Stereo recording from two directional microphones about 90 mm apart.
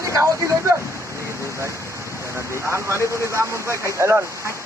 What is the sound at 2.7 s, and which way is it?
Speech, 30° right (ahead or behind).